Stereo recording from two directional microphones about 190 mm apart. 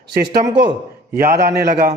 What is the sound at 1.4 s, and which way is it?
Speech, 55° right (ahead or behind).